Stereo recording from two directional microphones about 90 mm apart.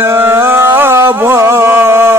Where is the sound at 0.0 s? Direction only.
25° right (ahead or behind).